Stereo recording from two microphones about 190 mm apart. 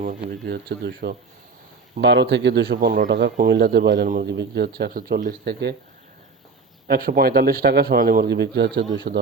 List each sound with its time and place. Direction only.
0.4 s speech: 55° right (ahead or behind)
3.1 s speech: 65° right (ahead or behind)
6.8 s a man's voice: 50° right (ahead or behind)